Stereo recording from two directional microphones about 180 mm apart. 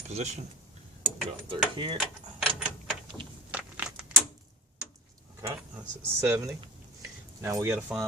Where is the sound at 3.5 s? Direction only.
5° right (ahead or behind).